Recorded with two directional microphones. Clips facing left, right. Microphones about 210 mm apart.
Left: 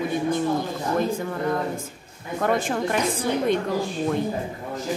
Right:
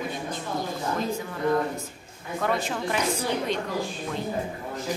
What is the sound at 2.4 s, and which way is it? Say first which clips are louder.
Speech: left 4 dB; 45° left (ahead or behind).